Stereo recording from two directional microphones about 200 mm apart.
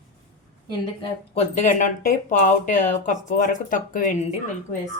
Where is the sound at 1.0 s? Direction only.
30° left (ahead or behind).